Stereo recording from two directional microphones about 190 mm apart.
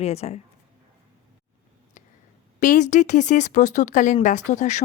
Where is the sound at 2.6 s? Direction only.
40° left (ahead or behind).